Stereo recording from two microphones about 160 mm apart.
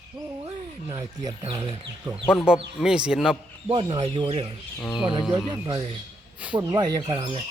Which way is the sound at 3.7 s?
30° right (ahead or behind).